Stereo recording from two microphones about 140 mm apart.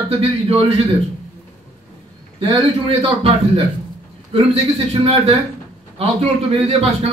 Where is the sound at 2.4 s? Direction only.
40° right (ahead or behind).